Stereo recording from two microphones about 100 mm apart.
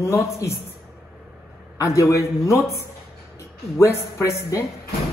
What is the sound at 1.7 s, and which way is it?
A man's voice, 30° left (ahead or behind).